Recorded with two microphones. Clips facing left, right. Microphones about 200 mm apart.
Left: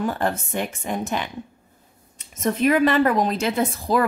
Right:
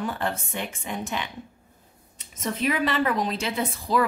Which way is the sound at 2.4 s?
50° left (ahead or behind).